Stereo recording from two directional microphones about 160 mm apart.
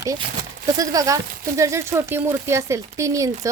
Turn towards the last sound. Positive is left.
turn(degrees=-20)  # may be behind; listen again after turning